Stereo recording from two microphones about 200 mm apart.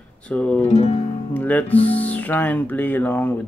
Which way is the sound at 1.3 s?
10° left (ahead or behind).